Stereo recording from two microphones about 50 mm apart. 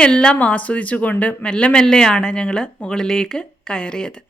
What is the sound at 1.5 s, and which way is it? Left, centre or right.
Speech, centre.